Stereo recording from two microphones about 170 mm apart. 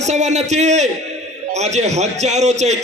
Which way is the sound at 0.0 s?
40° right (ahead or behind).